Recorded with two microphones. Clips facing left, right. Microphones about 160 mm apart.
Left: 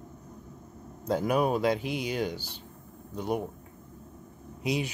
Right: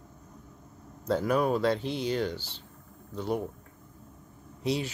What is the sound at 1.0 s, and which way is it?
Speech, 15° left (ahead or behind).